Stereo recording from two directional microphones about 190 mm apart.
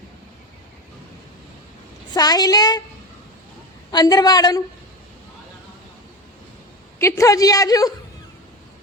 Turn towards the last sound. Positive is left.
turn(degrees=20)  # may be behind; listen again after turning